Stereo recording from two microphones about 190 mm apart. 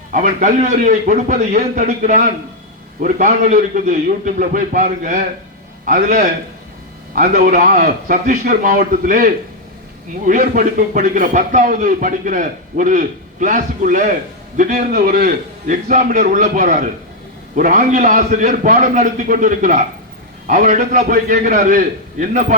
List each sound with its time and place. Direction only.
0.1 s speech: 40° right (ahead or behind)